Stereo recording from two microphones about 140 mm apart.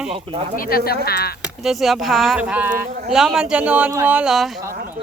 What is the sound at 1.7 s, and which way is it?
Speech, centre (ahead or behind).